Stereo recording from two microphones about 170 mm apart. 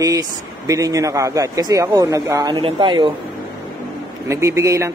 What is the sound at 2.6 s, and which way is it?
Speech, 30° right (ahead or behind).